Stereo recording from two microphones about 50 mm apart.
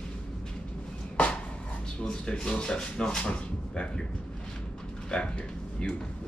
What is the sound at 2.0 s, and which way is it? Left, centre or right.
Speech, centre.